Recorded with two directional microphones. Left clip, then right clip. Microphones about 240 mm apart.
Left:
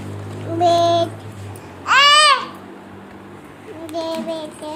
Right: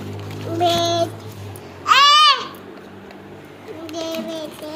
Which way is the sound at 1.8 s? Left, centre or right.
Centre.